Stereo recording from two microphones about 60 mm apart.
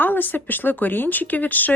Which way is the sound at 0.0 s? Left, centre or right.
Left.